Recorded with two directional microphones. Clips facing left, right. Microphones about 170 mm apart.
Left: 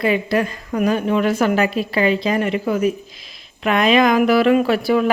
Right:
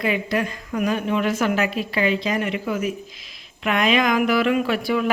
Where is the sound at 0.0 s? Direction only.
35° left (ahead or behind).